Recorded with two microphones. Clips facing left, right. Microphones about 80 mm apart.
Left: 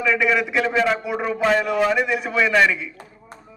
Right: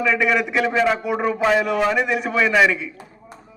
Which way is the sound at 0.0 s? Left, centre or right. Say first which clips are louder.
Right 1 dB; centre.